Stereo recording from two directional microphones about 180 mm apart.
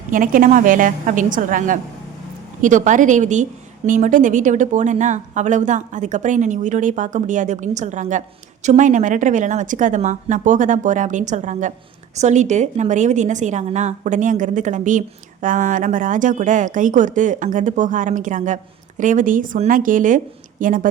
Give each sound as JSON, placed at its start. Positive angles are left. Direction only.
{"t": 0.1, "sound": "a woman's voice", "side_deg": -50}